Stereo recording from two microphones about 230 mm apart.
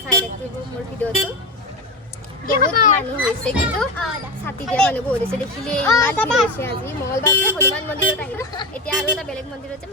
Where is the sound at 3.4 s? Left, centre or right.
Centre.